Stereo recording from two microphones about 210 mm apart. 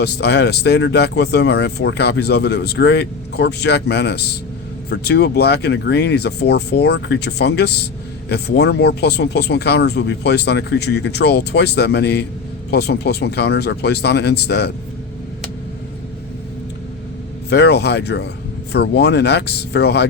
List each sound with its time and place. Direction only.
0.0 s speech: 55° left (ahead or behind)
17.5 s speech: 50° left (ahead or behind)